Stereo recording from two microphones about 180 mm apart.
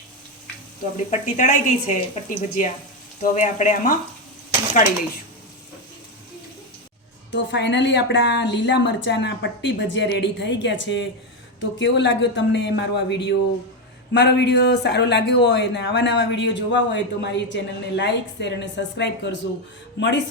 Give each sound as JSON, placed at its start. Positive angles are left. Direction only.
{"t": 0.9, "sound": "speech", "side_deg": 40}
{"t": 7.3, "sound": "a woman's voice", "side_deg": 85}